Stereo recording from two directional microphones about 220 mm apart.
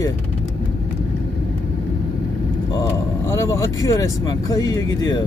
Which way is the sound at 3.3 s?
15° left (ahead or behind).